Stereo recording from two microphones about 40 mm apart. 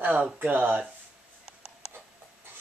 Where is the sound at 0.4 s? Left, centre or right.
Right.